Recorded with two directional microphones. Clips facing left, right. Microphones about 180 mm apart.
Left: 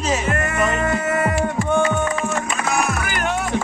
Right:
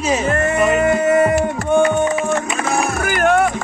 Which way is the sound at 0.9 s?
20° right (ahead or behind).